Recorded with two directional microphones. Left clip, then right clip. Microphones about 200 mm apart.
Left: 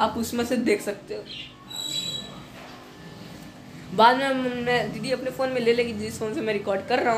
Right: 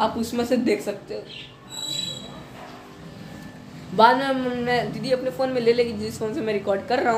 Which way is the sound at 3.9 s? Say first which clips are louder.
Right 1 dB; centre (ahead or behind).